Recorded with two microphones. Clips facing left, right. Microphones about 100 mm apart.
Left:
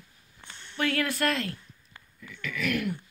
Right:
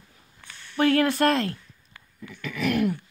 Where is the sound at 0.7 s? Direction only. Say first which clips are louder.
Right 8 dB; 35° right (ahead or behind).